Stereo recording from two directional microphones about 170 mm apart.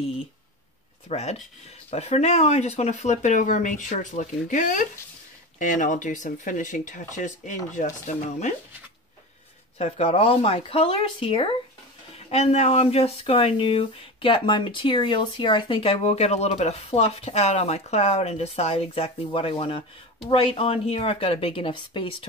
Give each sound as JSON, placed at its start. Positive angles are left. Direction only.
{"t": 1.0, "sound": "speech", "side_deg": 40}
{"t": 9.8, "sound": "speech", "side_deg": 35}